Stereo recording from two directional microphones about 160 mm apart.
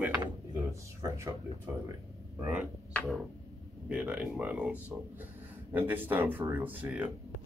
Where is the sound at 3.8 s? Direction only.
10° right (ahead or behind).